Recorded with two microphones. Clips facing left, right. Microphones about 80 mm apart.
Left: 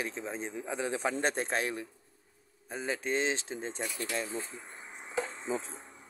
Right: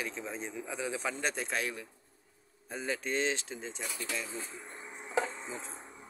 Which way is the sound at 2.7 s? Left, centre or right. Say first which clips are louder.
Left 2 dB; centre.